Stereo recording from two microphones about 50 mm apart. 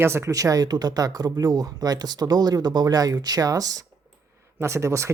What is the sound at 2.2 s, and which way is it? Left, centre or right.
Speech, right.